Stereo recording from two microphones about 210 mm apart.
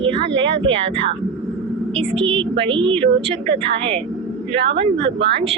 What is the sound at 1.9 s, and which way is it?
Speech, 25° right (ahead or behind).